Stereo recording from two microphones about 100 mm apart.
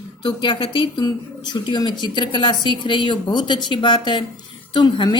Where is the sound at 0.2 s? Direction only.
55° left (ahead or behind).